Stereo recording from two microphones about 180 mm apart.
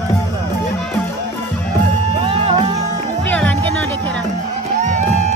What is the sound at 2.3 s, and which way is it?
Music, 30° right (ahead or behind).